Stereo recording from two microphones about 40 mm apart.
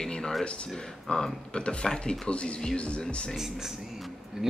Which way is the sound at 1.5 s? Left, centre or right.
Left.